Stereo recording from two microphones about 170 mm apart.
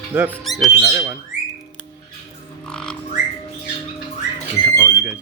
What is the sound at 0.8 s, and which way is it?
Speech, 20° right (ahead or behind).